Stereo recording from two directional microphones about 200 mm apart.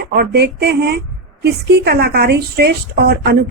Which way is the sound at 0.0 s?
50° right (ahead or behind).